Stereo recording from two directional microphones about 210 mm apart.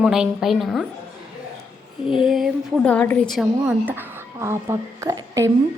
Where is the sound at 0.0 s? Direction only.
5° right (ahead or behind).